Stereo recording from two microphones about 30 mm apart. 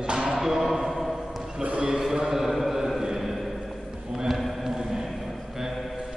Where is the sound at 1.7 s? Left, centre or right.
Right.